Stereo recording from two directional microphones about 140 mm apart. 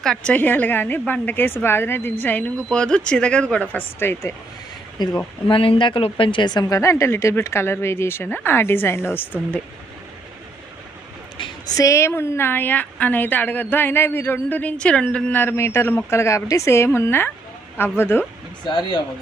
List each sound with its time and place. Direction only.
0.0 s a woman's voice: 5° left (ahead or behind)
5.0 s a woman's voice: 30° left (ahead or behind); by 9.6 s 15° left (ahead or behind)
11.8 s a woman's voice: 20° left (ahead or behind)
18.7 s speech: 35° left (ahead or behind)